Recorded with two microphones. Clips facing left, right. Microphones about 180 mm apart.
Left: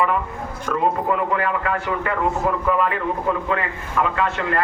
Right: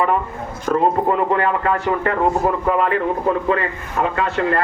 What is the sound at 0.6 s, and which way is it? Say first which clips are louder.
Speech: right 5 dB; 35° right (ahead or behind).